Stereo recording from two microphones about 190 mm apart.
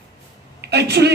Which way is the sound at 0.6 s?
60° right (ahead or behind).